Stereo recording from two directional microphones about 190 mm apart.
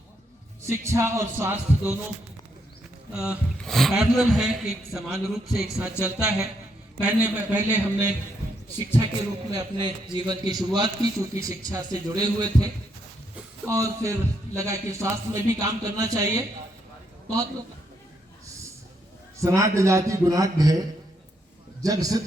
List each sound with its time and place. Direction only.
0.6 s speech: 15° right (ahead or behind)
3.1 s a man's voice: 5° right (ahead or behind)
19.5 s speech: 15° right (ahead or behind)
21.8 s a man's voice: 20° right (ahead or behind)